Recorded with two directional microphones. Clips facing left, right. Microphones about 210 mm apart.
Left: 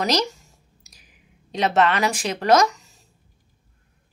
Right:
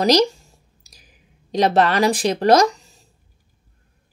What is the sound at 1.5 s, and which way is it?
Speech, 35° right (ahead or behind).